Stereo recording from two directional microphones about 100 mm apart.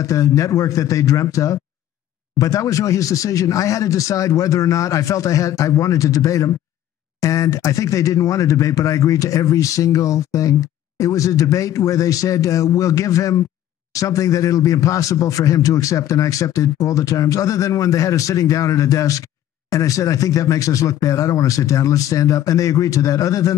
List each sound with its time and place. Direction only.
0.0 s a man's voice: 35° left (ahead or behind)